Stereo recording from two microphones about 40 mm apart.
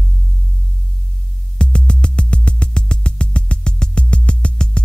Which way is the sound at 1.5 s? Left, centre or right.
Left.